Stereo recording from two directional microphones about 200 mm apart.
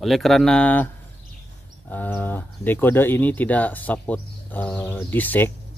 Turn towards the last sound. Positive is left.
turn(degrees=10)  # may be behind; listen again after turning